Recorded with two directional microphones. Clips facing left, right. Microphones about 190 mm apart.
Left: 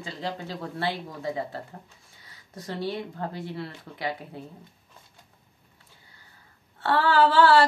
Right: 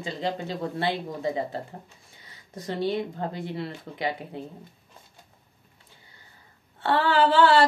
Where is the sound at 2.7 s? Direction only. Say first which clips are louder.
Right 4 dB; 20° right (ahead or behind).